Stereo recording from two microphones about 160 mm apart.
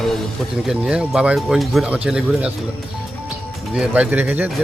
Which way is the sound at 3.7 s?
5° right (ahead or behind).